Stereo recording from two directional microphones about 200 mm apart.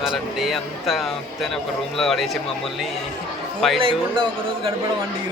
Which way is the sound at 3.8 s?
25° right (ahead or behind).